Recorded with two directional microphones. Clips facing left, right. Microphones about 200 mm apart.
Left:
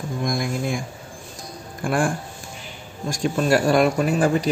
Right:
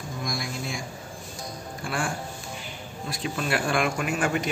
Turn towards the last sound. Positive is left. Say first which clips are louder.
# left 7 dB
turn(degrees=35)  # may be behind; listen again after turning